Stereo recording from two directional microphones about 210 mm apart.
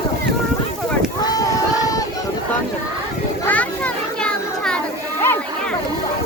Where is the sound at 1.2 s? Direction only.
20° left (ahead or behind).